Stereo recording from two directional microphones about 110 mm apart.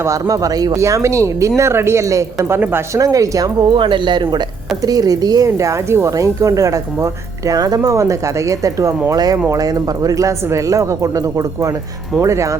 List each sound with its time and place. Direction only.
0.0 s speech: 30° right (ahead or behind)
3.0 s speech: 35° right (ahead or behind)
3.7 s speech: 50° right (ahead or behind); by 12.5 s 25° right (ahead or behind)